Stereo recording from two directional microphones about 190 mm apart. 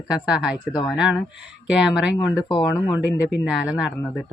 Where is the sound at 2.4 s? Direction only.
25° left (ahead or behind).